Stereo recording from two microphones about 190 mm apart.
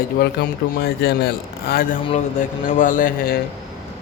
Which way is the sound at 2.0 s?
35° left (ahead or behind).